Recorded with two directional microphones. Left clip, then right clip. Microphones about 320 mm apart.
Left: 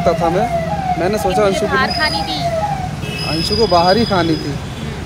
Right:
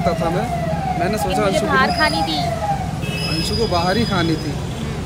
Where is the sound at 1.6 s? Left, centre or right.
Centre.